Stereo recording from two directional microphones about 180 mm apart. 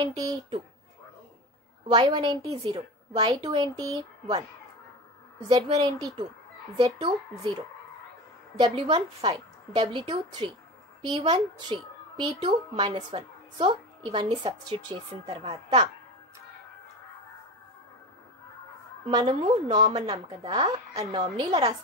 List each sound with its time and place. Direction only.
0.0 s a child's voice: 20° right (ahead or behind)
1.9 s a child's voice: 25° right (ahead or behind)
5.5 s a child's voice: 20° right (ahead or behind)
8.5 s a child's voice: 30° right (ahead or behind)
19.0 s a child's voice: 25° right (ahead or behind)